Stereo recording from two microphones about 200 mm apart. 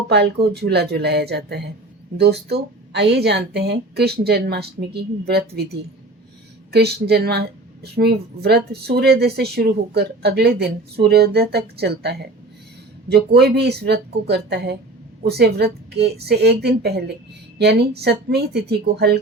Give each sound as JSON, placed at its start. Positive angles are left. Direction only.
{"t": 0.1, "sound": "speech", "side_deg": -55}
{"t": 6.7, "sound": "a woman's voice", "side_deg": -55}